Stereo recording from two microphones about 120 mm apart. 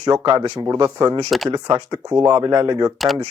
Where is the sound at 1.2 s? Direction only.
Centre (ahead or behind).